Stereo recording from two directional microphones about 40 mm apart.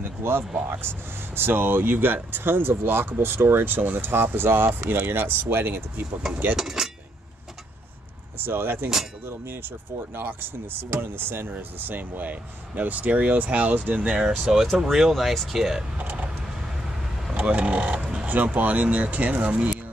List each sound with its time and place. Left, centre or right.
0.2 s speech: right
6.5 s cutlery: centre
8.4 s speech: right
11.8 s speech: right
14.0 s speech: right; by 15.8 s centre
16.0 s vehicle: right
17.3 s speech: right
18.2 s speech: right